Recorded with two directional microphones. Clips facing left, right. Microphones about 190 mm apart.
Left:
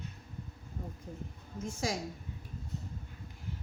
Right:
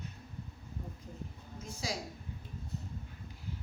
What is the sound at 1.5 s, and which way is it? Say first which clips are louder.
Speech: left 5 dB; 50° left (ahead or behind).